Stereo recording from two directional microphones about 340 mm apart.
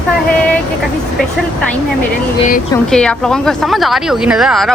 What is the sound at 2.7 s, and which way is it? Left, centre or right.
A woman's voice, centre.